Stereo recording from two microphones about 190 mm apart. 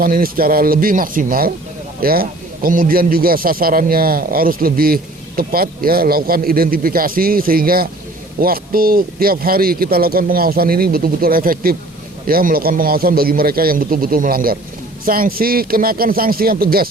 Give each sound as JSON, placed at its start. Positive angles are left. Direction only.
{"t": 0.0, "sound": "a man's voice", "side_deg": -50}